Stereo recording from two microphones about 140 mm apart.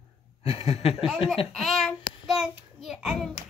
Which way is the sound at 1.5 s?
Centre (ahead or behind).